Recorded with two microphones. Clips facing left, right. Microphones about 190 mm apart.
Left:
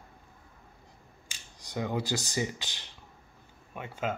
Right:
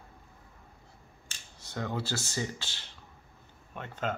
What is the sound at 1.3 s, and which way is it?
Speech, 15° left (ahead or behind).